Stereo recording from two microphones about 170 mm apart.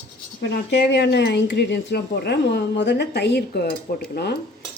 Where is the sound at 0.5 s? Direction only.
85° left; by 4.0 s 70° left (ahead or behind).